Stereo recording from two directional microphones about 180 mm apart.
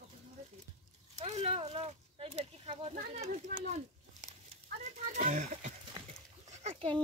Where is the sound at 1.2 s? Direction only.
35° right (ahead or behind).